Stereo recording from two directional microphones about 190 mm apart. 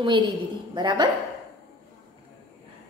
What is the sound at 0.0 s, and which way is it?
A woman's voice, 25° right (ahead or behind).